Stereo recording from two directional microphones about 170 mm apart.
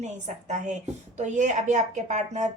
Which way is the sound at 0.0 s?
45° right (ahead or behind).